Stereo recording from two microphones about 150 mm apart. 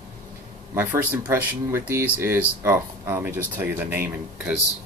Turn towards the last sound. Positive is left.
turn(degrees=-10)  # may be behind; listen again after turning